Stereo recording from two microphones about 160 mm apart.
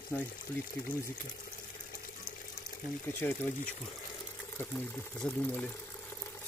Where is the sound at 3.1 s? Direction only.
10° left (ahead or behind).